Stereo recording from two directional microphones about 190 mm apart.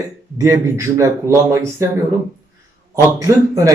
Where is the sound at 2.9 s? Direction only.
15° right (ahead or behind).